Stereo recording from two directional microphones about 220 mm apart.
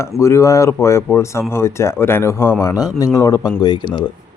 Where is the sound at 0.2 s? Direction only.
15° left (ahead or behind).